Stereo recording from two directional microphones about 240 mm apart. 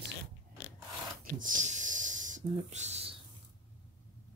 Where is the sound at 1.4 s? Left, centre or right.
Right.